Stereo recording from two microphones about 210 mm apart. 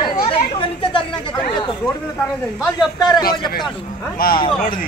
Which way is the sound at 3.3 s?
45° left (ahead or behind).